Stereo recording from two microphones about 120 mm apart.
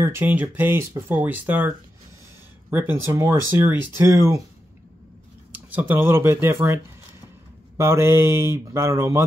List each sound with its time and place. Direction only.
0.0 s speech: 15° right (ahead or behind)
2.7 s speech: 20° right (ahead or behind)
5.5 s speech: 15° right (ahead or behind)